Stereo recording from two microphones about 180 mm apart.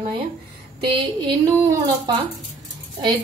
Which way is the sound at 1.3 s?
20° right (ahead or behind).